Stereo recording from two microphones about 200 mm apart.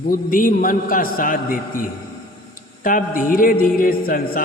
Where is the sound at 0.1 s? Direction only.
45° left (ahead or behind).